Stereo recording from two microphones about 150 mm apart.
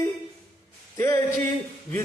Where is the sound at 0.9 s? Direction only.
20° left (ahead or behind).